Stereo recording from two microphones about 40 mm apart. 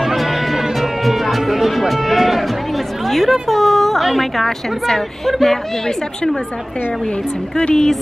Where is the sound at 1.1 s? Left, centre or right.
Centre.